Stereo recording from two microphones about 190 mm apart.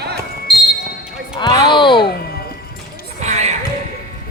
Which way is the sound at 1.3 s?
25° left (ahead or behind).